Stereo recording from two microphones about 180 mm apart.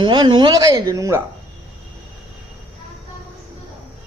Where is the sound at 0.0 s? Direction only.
25° right (ahead or behind).